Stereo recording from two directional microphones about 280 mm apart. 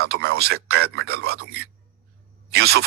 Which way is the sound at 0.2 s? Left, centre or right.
Right.